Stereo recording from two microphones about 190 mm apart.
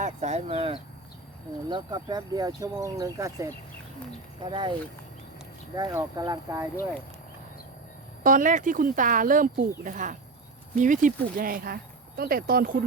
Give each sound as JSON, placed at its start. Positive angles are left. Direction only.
{"t": 0.0, "sound": "speech", "side_deg": -35}
{"t": 5.7, "sound": "speech", "side_deg": -20}
{"t": 8.2, "sound": "speech", "side_deg": -45}